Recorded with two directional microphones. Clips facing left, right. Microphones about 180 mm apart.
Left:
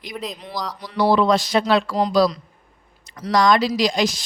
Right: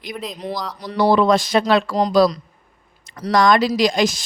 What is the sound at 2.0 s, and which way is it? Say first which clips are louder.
Speech: right 2 dB; 45° right (ahead or behind).